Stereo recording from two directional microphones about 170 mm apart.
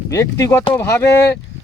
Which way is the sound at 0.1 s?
20° left (ahead or behind).